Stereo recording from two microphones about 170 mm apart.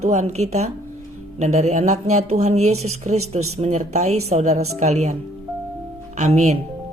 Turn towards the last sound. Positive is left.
turn(degrees=-40)  # may be behind; listen again after turning